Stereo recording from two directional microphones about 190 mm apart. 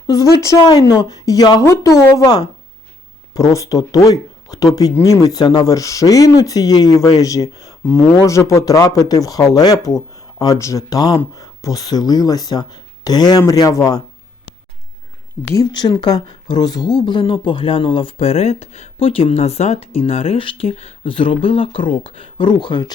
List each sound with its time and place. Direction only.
0.4 s speech: 20° left (ahead or behind)
3.5 s speech: 15° left (ahead or behind)
15.5 s speech: 20° left (ahead or behind)